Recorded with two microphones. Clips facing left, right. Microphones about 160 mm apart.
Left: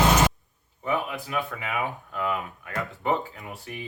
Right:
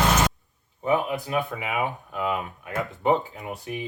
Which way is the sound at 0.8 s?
20° right (ahead or behind).